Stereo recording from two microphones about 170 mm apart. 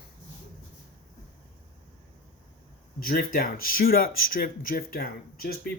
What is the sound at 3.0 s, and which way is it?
Speech, 60° left (ahead or behind).